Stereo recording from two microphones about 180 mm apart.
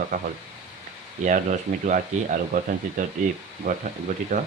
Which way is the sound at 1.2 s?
45° right (ahead or behind).